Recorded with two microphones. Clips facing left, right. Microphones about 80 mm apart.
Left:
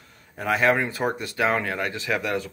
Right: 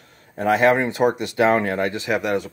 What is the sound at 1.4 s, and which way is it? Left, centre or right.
Speech, right.